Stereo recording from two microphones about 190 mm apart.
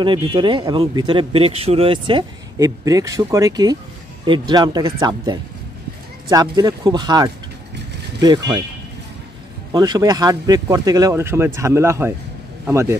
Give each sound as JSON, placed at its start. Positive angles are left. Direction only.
{"t": 0.0, "sound": "speech", "side_deg": -25}
{"t": 9.7, "sound": "speech", "side_deg": -20}